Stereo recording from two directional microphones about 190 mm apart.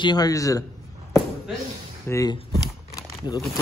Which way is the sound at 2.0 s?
15° left (ahead or behind).